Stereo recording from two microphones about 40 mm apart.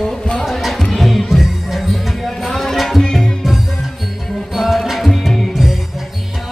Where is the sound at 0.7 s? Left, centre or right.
Centre.